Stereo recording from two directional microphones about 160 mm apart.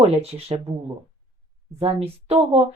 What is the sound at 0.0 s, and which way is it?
Speech, 40° right (ahead or behind).